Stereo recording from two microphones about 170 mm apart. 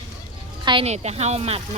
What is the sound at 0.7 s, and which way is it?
Speech, 35° right (ahead or behind).